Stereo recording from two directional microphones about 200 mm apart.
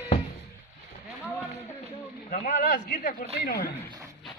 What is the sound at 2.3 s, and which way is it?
Speech, 40° left (ahead or behind).